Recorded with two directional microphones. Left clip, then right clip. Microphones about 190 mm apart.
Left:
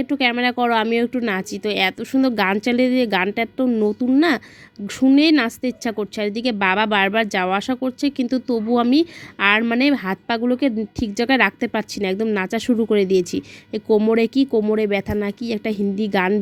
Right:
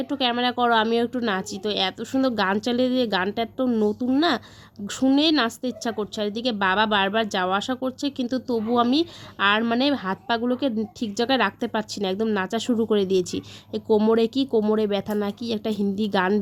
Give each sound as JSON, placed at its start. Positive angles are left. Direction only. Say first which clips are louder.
{"t": 0.0, "sound": "a woman's voice", "louder": "left 4 dB", "side_deg": 25}